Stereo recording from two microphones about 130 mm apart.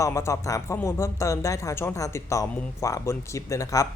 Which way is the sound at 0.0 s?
25° left (ahead or behind).